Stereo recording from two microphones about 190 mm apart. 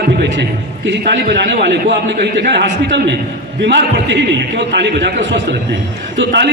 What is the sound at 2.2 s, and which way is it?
A man's voice, 65° right (ahead or behind).